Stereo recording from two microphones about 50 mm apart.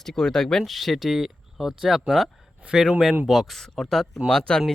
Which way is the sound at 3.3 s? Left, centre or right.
Centre.